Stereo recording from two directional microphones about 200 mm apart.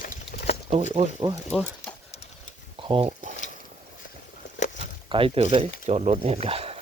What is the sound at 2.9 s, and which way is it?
Speech, 30° right (ahead or behind).